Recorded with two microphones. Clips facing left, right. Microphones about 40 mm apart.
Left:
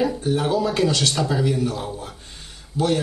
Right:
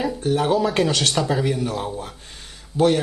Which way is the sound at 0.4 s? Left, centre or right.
Right.